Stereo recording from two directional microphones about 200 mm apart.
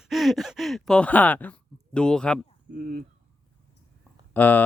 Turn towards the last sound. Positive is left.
turn(degrees=10)  # may be behind; listen again after turning